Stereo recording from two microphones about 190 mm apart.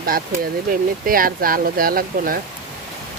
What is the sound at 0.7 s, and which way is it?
Speech, 50° right (ahead or behind).